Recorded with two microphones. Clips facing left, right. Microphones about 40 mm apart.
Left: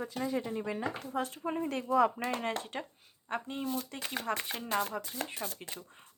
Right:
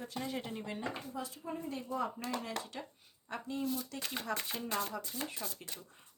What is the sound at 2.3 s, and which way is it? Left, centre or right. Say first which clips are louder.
Speech: left 5 dB; left.